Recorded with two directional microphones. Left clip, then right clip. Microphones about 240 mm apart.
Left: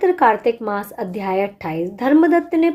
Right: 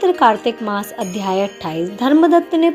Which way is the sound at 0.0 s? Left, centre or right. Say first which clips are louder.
Right 1 dB; right.